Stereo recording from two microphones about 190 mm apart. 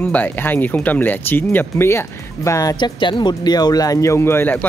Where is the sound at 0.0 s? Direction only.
10° left (ahead or behind).